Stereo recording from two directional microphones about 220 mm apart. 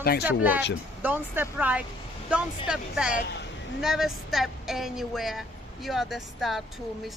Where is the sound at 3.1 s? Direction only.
50° left (ahead or behind).